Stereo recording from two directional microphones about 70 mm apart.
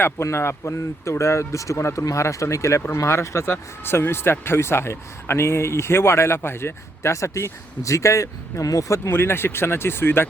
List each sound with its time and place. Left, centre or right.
0.0 s speech: left
9.0 s speech: left